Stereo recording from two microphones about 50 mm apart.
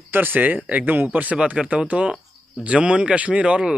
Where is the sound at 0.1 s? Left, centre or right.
Right.